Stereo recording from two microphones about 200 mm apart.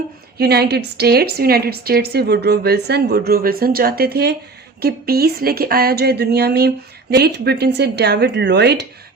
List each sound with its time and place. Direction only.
0.3 s speech: 55° right (ahead or behind)